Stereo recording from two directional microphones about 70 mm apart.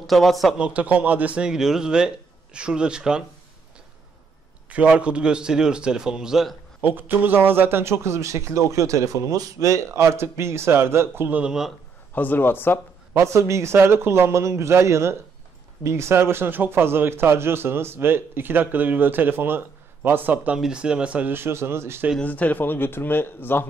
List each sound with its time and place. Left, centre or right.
0.0 s speech: centre
0.6 s speech: right
4.6 s speech: centre
6.8 s a man's voice: right
11.2 s speech: right
12.2 s speech: left
13.1 s a man's voice: right
20.5 s speech: centre
21.3 s a man's voice: right
22.2 s speech: left